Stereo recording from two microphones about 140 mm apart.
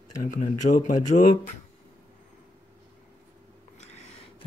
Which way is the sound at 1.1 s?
75° left (ahead or behind).